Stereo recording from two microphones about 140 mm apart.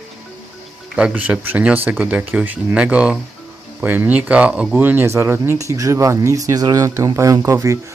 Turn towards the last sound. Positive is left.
turn(degrees=-25)  # may be behind; listen again after turning